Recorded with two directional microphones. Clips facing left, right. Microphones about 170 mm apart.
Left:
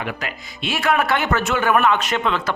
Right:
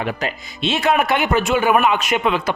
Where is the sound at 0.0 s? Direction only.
25° right (ahead or behind).